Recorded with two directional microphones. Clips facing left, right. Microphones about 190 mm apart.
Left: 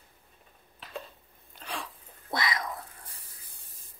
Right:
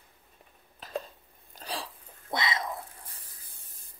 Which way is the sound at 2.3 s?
25° right (ahead or behind).